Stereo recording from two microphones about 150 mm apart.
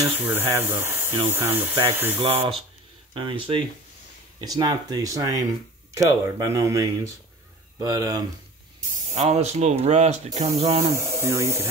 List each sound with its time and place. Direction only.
0.1 s speech: 15° right (ahead or behind)
3.2 s speech: 35° right (ahead or behind)
8.9 s speech: 50° right (ahead or behind)
11.0 s speech: 15° right (ahead or behind)